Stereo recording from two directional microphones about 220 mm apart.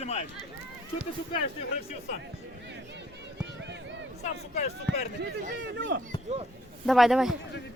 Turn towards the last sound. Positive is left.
turn(degrees=0)  # may be behind; listen again after turning